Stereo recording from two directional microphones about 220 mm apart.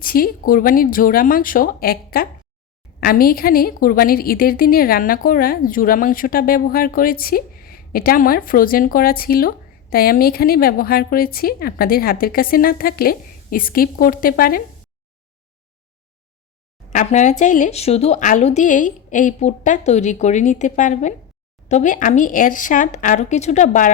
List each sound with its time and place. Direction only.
0.0 s a woman's voice: 40° left (ahead or behind)
16.9 s a woman's voice: 35° left (ahead or behind)